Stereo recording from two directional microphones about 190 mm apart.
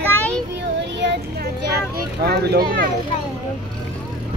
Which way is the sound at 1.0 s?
65° right (ahead or behind).